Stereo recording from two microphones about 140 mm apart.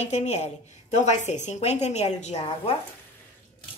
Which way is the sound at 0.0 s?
55° left (ahead or behind).